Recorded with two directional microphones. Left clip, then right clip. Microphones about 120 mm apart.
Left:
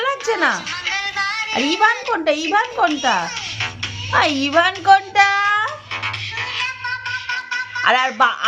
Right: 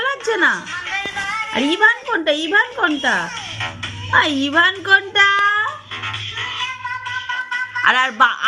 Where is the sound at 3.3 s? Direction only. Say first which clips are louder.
Left 1 dB; 35° right (ahead or behind).